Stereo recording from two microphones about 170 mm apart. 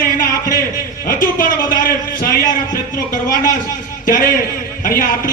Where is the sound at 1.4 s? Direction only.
55° left (ahead or behind).